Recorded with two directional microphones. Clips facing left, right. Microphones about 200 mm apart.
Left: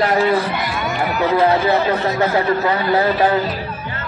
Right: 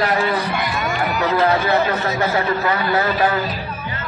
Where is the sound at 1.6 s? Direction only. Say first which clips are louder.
Left 2 dB; 30° left (ahead or behind).